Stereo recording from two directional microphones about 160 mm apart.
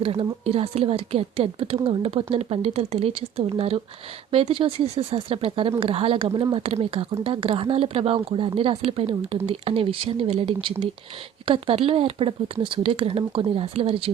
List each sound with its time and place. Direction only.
0.0 s speech: 35° right (ahead or behind)